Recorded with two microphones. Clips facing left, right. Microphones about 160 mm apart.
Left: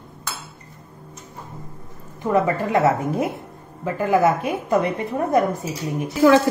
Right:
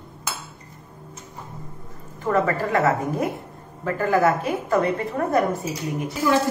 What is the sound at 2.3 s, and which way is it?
A woman's voice, 20° left (ahead or behind).